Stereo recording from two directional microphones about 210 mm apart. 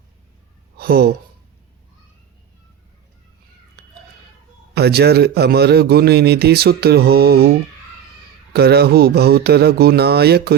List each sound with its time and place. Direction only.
0.8 s speech: 45° right (ahead or behind)
3.8 s a sound: 50° right (ahead or behind)
4.7 s a man's voice: 50° right (ahead or behind)
8.5 s a man's voice: 50° right (ahead or behind)